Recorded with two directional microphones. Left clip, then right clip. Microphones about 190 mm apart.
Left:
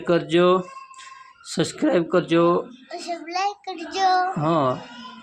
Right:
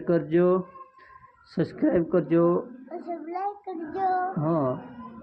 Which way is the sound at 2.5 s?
30° left (ahead or behind).